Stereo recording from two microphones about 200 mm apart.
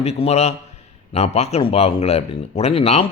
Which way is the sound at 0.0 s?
30° left (ahead or behind).